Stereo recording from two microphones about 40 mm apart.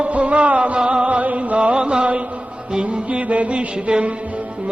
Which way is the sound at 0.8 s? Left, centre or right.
Right.